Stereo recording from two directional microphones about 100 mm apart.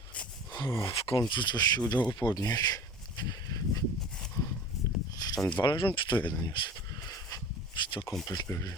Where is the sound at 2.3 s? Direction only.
40° left (ahead or behind).